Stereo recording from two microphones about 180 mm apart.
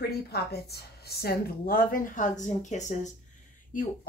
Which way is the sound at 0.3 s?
60° left (ahead or behind).